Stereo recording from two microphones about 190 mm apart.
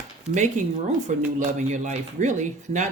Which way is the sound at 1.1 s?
40° right (ahead or behind).